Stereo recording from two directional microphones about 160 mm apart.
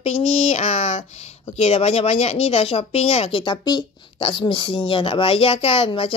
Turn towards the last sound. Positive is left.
turn(degrees=35)  # may be behind; listen again after turning